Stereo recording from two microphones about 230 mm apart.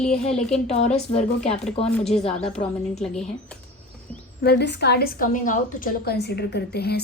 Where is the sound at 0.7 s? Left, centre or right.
Left.